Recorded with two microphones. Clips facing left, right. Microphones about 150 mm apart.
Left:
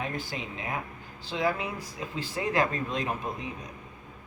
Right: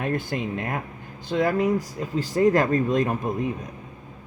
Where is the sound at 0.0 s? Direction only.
55° right (ahead or behind).